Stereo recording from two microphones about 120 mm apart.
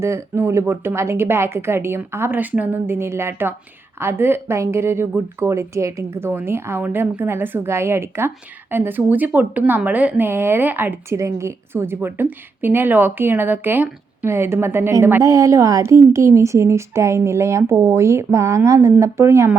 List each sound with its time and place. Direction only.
0.0 s a woman's voice: 20° right (ahead or behind)